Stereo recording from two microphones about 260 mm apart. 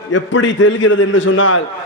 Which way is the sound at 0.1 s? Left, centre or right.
Left.